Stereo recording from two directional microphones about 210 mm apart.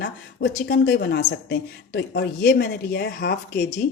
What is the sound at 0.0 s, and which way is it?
Speech, 50° left (ahead or behind).